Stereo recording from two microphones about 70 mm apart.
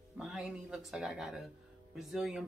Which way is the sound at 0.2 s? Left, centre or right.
Centre.